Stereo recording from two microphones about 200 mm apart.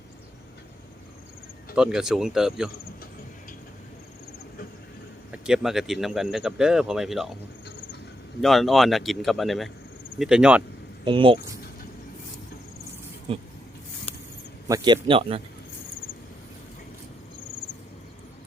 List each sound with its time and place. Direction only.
1.7 s speech: 5° right (ahead or behind)
5.3 s speech: 5° right (ahead or behind)
8.4 s speech: centre (ahead or behind)
11.0 s speech: 25° right (ahead or behind)
13.3 s a man's voice: 30° right (ahead or behind)
14.7 s a man's voice: 25° right (ahead or behind)